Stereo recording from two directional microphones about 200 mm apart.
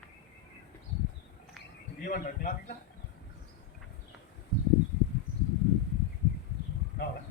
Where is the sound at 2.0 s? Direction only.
40° left (ahead or behind).